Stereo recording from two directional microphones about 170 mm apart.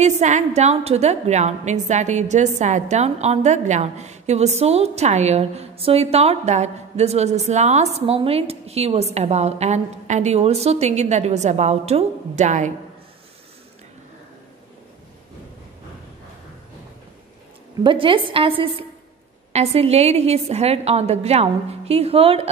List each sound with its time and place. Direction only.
0.0 s a woman's voice: 45° right (ahead or behind)
17.8 s a woman's voice: 30° right (ahead or behind)